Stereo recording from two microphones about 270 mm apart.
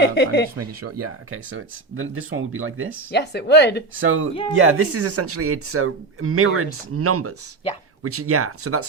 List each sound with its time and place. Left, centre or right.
0.0 s speech: left
0.8 s speech: right
3.1 s speech: left
4.0 s speech: right